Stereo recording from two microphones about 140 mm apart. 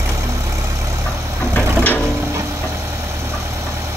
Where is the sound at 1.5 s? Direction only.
10° left (ahead or behind).